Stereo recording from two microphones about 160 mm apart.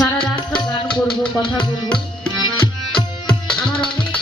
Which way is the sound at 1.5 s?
5° left (ahead or behind).